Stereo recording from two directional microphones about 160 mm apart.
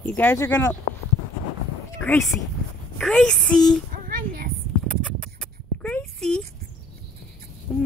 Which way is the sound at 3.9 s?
65° right (ahead or behind).